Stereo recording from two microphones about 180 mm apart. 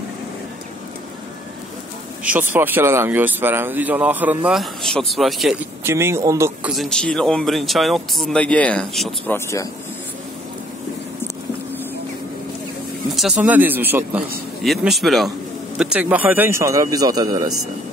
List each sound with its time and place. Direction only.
2.2 s speech: 10° right (ahead or behind)
5.9 s speech: 15° right (ahead or behind)
6.7 s speech: centre (ahead or behind)
9.3 s speech: 15° left (ahead or behind)
13.1 s speech: centre (ahead or behind)
14.6 s speech: centre (ahead or behind); by 17.5 s 20° right (ahead or behind)